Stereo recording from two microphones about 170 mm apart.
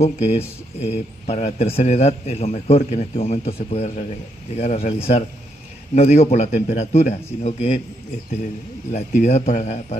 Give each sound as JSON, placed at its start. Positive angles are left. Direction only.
{"t": 0.0, "sound": "a man's voice", "side_deg": 40}
{"t": 8.9, "sound": "speech", "side_deg": 40}